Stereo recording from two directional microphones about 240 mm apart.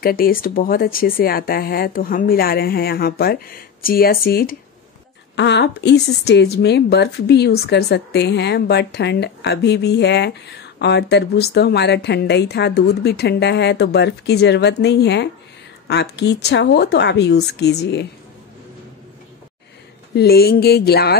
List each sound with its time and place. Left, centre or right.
0.0 s speech: left
20.2 s speech: left